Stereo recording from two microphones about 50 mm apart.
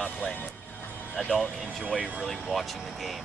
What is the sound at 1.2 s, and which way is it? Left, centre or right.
Speech, centre.